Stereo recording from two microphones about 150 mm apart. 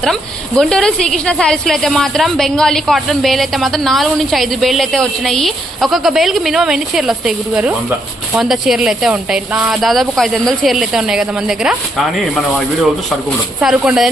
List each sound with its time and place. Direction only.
0.0 s a woman's voice: centre (ahead or behind)
13.6 s a woman's voice: 5° right (ahead or behind)